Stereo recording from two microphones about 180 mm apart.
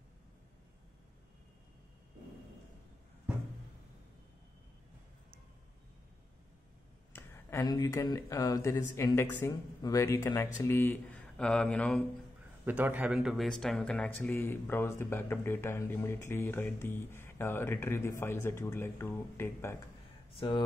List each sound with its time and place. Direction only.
7.1 s a sound: 15° left (ahead or behind)
7.7 s speech: 20° left (ahead or behind)
12.6 s speech: 10° right (ahead or behind); by 19.8 s 15° left (ahead or behind)
20.3 s speech: 25° left (ahead or behind)